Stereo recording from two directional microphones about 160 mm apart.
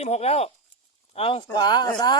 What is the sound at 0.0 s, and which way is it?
Speech, 40° left (ahead or behind).